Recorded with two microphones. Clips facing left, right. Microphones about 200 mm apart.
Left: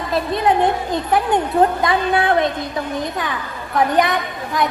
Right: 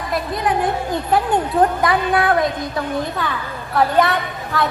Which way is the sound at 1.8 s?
25° left (ahead or behind).